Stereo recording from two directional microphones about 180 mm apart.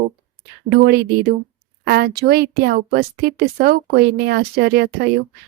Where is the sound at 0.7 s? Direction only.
65° right (ahead or behind).